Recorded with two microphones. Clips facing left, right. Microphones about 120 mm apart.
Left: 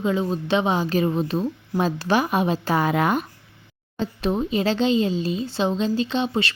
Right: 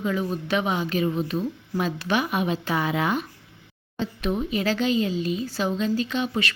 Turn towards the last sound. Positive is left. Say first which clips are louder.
# left 3 dB
turn(degrees=30)  # may be behind; listen again after turning